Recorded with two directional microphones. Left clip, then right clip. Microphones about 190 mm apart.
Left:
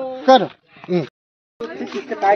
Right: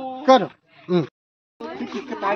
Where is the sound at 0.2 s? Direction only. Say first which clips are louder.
Left 3 dB; 40° left (ahead or behind).